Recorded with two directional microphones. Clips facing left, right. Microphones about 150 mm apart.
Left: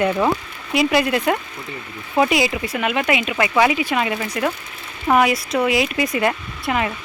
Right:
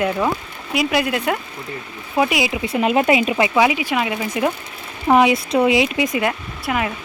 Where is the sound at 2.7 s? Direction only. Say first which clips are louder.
Right 4 dB; 30° right (ahead or behind).